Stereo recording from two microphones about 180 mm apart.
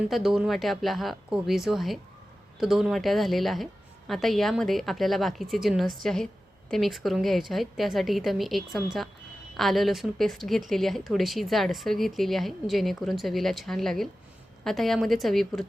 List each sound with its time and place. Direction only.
0.1 s a woman's voice: centre (ahead or behind)